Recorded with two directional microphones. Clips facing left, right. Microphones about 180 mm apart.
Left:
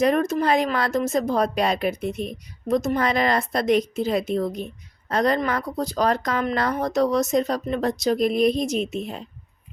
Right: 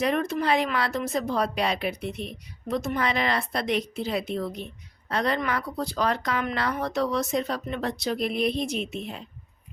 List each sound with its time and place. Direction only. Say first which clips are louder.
0.0 s speech: left 5 dB; 45° left (ahead or behind)